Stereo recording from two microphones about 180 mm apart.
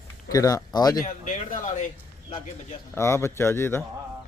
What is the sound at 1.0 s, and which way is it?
Speech, 50° left (ahead or behind).